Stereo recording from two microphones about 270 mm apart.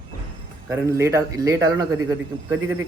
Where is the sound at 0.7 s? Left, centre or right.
Centre.